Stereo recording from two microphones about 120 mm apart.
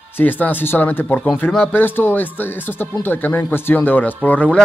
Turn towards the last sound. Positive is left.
turn(degrees=10)  # may be behind; listen again after turning